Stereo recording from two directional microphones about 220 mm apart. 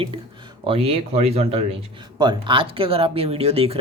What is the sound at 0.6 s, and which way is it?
Speech, 25° right (ahead or behind).